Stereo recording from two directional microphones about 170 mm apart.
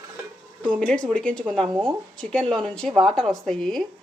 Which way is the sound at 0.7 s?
5° left (ahead or behind).